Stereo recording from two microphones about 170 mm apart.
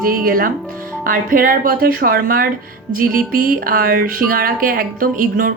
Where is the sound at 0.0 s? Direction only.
55° right (ahead or behind).